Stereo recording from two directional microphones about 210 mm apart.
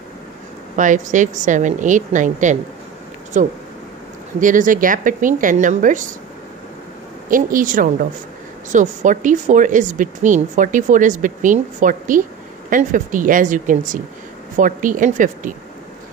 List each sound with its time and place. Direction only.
0.7 s speech: 35° right (ahead or behind)
7.2 s speech: 40° right (ahead or behind)